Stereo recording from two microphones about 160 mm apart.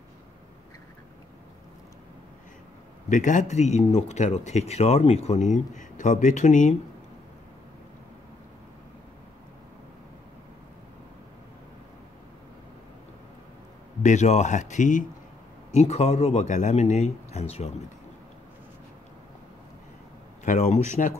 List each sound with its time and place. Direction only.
3.1 s speech: 50° left (ahead or behind)
5.5 s speech: 50° left (ahead or behind)
14.0 s speech: 45° left (ahead or behind)
20.4 s speech: 45° left (ahead or behind)